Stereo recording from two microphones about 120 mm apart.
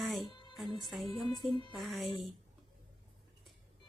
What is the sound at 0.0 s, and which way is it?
Music, centre (ahead or behind).